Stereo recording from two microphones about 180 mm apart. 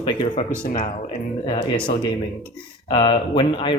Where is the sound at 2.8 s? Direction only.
30° left (ahead or behind).